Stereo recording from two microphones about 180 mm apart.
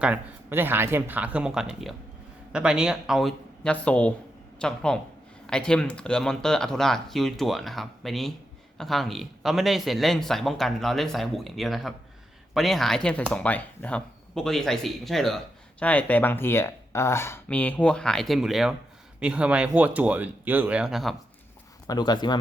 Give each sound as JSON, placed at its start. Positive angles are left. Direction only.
{"t": 0.0, "sound": "speech", "side_deg": -10}
{"t": 21.8, "sound": "speech", "side_deg": 25}